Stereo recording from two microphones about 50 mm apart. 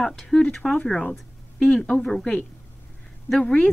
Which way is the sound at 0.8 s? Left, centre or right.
Left.